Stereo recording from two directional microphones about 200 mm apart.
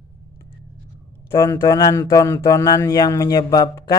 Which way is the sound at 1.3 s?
15° left (ahead or behind).